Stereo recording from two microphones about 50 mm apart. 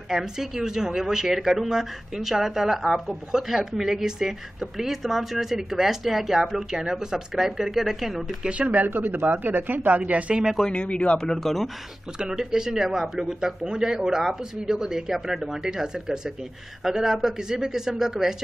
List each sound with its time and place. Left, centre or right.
0.1 s a woman's voice: centre
8.5 s speech: right
8.8 s speech: right
10.6 s speech: left
11.1 s speech: centre
12.2 s a woman's voice: centre